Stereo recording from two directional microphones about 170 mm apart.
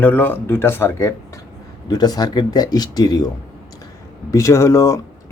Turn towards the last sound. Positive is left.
turn(degrees=15)  # may be behind; listen again after turning